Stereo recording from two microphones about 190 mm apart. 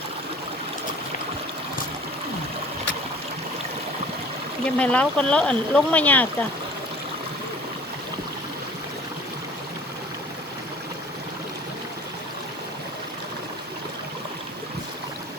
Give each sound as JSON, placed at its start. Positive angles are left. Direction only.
{"t": 4.6, "sound": "speech", "side_deg": 5}